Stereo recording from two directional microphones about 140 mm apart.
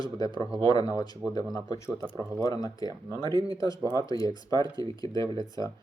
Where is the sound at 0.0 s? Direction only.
30° left (ahead or behind).